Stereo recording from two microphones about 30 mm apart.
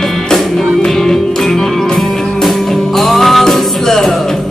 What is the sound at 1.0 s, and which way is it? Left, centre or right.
Music, centre.